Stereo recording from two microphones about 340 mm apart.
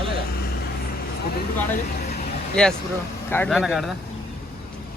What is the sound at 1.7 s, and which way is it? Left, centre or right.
Speech, left.